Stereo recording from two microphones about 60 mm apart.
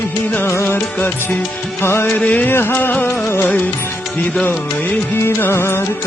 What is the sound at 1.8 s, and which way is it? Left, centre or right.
Music, left.